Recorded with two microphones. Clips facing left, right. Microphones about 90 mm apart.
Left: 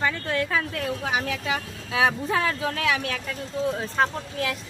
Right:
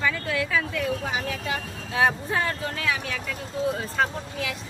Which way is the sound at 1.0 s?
75° left (ahead or behind).